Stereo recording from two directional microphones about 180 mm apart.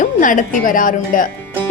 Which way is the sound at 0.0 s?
45° left (ahead or behind).